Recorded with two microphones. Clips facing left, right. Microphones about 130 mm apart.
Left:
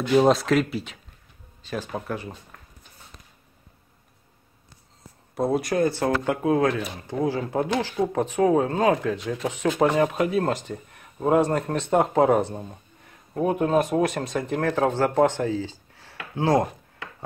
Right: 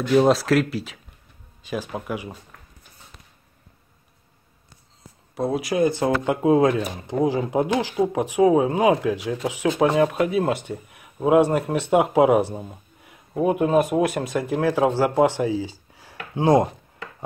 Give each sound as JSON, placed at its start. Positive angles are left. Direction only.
{"t": 0.1, "sound": "speech", "side_deg": 0}
{"t": 5.3, "sound": "speech", "side_deg": 0}
{"t": 5.9, "sound": "speech", "side_deg": -15}